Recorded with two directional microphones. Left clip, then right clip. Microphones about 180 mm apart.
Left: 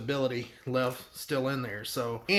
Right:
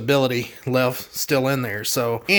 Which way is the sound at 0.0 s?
45° right (ahead or behind).